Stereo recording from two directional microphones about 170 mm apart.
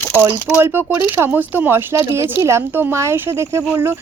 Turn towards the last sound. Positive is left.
turn(degrees=-15)  # may be behind; listen again after turning